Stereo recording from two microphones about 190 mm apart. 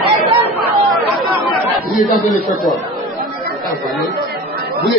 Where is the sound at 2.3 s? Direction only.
Centre (ahead or behind).